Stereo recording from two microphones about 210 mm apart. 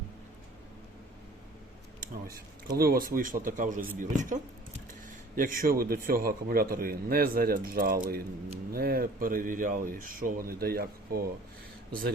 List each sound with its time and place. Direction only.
2.2 s a man's voice: 45° right (ahead or behind)